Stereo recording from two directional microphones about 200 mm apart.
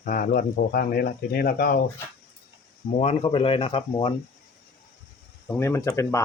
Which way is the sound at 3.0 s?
30° left (ahead or behind).